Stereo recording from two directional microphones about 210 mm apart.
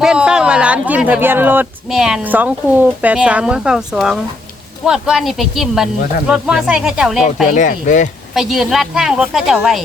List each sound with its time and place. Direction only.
0.0 s a woman's voice: 5° right (ahead or behind)
7.5 s speech: 35° left (ahead or behind)
8.4 s a woman's voice: centre (ahead or behind)